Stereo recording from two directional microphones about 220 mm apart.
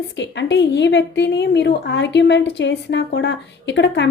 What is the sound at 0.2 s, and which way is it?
A woman's voice, 55° left (ahead or behind).